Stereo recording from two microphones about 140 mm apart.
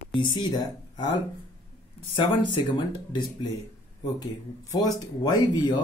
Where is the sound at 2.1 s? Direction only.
35° left (ahead or behind).